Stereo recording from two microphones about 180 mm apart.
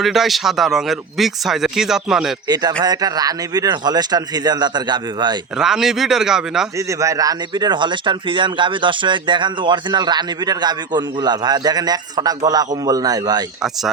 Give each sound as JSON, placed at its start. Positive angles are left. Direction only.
{"t": 0.0, "sound": "a man's voice", "side_deg": 0}
{"t": 2.5, "sound": "speech", "side_deg": -25}
{"t": 5.5, "sound": "a man's voice", "side_deg": -5}
{"t": 6.7, "sound": "speech", "side_deg": -15}